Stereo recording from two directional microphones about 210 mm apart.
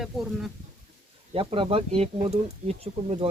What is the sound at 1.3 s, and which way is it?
Speech, 25° right (ahead or behind).